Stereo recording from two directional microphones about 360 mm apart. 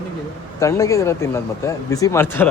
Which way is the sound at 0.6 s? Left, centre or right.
Centre.